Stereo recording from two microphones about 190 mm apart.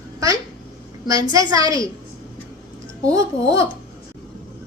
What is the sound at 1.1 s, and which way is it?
Speech, 20° right (ahead or behind).